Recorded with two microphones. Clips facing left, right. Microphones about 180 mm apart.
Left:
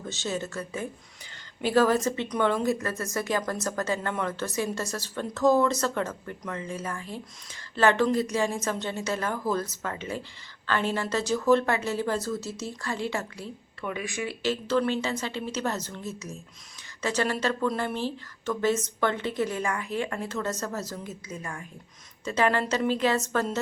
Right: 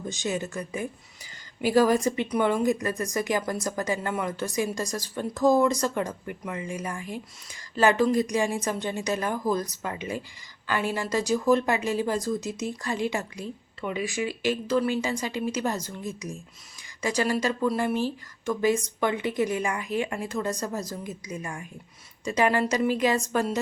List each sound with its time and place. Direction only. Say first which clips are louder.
0.0 s speech: right 2 dB; 15° right (ahead or behind)